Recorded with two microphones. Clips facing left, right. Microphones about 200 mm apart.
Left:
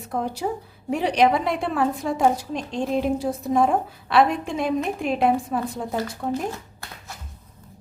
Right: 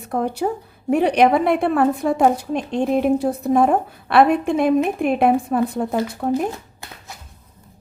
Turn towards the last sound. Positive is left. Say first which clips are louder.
# right 5 dB
turn(degrees=-55)  # may be behind; listen again after turning